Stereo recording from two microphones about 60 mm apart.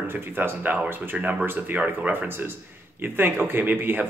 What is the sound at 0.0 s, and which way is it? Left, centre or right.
Speech, right.